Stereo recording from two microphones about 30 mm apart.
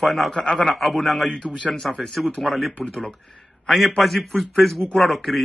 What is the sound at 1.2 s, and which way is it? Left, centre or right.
Speech, left.